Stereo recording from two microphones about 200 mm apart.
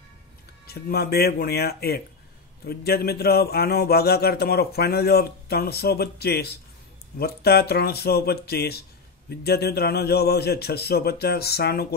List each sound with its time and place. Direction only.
0.7 s a man's voice: 50° left (ahead or behind)